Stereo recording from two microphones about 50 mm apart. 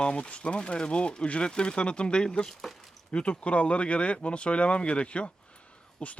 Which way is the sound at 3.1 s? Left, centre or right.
Left.